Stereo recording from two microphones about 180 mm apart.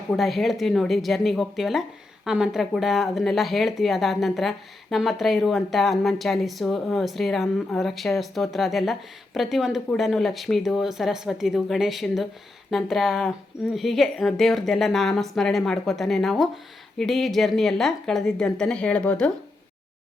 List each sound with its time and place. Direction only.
0.1 s speech: centre (ahead or behind)